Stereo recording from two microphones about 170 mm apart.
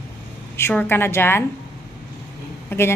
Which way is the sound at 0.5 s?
10° left (ahead or behind).